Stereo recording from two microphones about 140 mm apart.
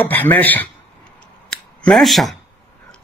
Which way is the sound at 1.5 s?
5° left (ahead or behind).